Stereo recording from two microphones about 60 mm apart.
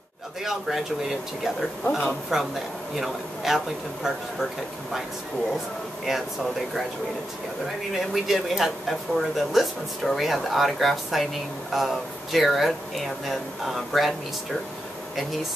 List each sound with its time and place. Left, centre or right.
0.4 s speech: centre
6.0 s speech: centre
8.1 s speech: centre